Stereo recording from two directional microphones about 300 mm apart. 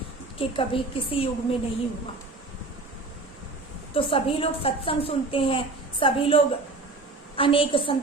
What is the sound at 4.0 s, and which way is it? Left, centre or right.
A woman's voice, centre.